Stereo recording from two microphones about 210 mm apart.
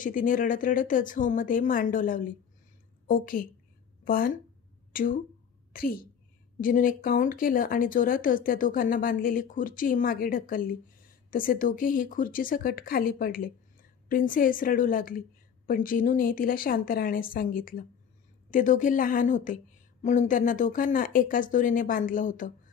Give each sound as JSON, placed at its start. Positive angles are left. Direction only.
{"t": 0.0, "sound": "a woman's voice", "side_deg": 40}